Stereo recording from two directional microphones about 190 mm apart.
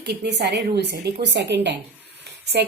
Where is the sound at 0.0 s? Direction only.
60° right (ahead or behind).